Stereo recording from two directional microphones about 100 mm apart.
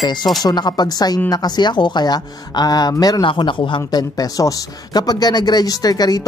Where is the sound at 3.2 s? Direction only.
55° left (ahead or behind).